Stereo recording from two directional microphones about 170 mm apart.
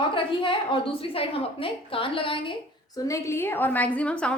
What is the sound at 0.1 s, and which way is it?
A woman's voice, 30° left (ahead or behind).